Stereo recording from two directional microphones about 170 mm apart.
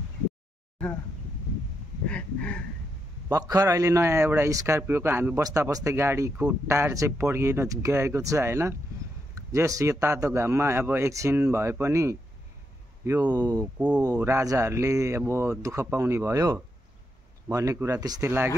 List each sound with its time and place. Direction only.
2.0 s speech: 5° left (ahead or behind)
3.3 s a man's voice: 20° right (ahead or behind)
13.7 s a man's voice: 5° right (ahead or behind)